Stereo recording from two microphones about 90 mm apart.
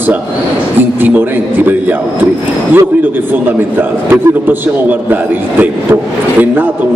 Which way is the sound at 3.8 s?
20° right (ahead or behind).